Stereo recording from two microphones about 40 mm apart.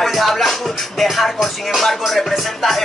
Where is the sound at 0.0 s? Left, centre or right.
Centre.